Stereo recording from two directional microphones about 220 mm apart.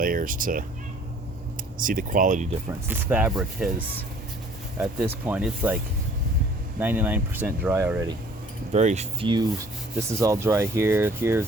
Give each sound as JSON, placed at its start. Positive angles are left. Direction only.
{"t": 0.0, "sound": "speech", "side_deg": -40}
{"t": 1.8, "sound": "speech", "side_deg": -40}
{"t": 2.8, "sound": "speech", "side_deg": -10}
{"t": 8.7, "sound": "speech", "side_deg": -30}
{"t": 10.0, "sound": "speech", "side_deg": -15}